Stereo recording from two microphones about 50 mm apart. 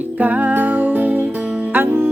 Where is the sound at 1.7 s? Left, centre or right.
Right.